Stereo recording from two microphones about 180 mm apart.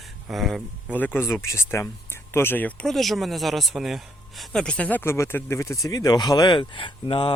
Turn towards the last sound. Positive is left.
turn(degrees=30)  # may be behind; listen again after turning